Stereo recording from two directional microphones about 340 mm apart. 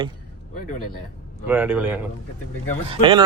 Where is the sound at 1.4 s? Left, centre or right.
Centre.